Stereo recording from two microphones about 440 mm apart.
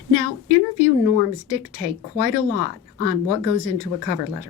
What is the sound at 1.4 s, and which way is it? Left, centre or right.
Speech, left.